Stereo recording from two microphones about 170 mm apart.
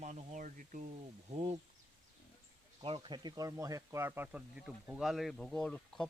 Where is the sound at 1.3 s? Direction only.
35° right (ahead or behind).